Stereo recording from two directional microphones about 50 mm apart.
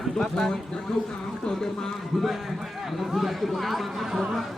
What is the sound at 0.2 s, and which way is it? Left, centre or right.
Speech, centre.